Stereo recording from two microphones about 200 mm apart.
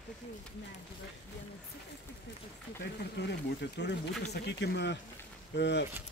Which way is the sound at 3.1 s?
60° left (ahead or behind).